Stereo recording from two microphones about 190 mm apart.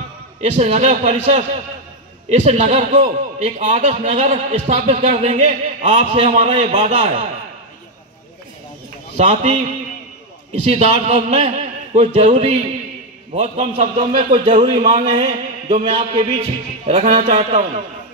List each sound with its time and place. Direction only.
0.6 s a man's voice: 35° right (ahead or behind)
9.1 s a man's voice: 35° right (ahead or behind)
10.7 s a man's voice: 35° right (ahead or behind)
15.1 s a sound: 35° right (ahead or behind)
16.8 s a man's voice: 35° right (ahead or behind)